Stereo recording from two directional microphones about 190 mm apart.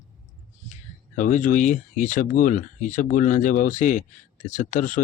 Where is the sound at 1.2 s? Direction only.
40° left (ahead or behind).